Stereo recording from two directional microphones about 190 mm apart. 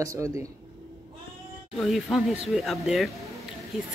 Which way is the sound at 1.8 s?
Centre (ahead or behind).